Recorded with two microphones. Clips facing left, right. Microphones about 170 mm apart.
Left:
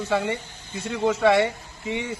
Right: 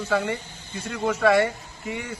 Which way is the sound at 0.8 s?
25° left (ahead or behind).